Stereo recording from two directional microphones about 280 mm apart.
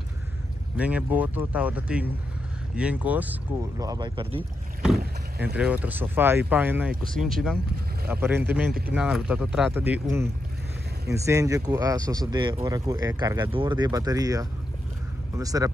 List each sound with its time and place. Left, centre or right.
0.7 s speech: centre
5.4 s speech: centre
8.6 s speech: right
8.9 s speech: centre